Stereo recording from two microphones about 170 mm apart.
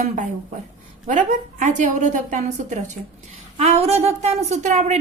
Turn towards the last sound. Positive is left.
turn(degrees=-45)  # may be behind; listen again after turning